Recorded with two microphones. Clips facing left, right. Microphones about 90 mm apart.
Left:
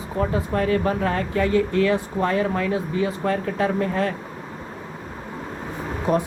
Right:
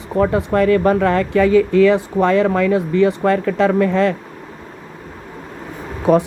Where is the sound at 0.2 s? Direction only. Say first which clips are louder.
Right 8 dB; 75° right (ahead or behind).